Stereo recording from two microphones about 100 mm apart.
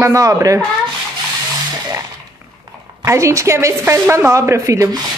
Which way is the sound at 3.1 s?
30° right (ahead or behind).